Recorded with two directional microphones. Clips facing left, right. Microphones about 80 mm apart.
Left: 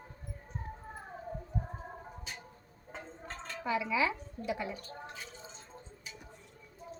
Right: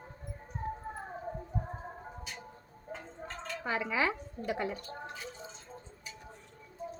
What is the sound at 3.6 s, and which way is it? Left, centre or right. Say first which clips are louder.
A woman's voice: left 1 dB; right.